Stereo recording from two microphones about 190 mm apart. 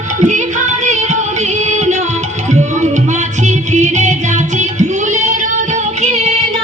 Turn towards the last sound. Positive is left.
turn(degrees=-35)  # may be behind; listen again after turning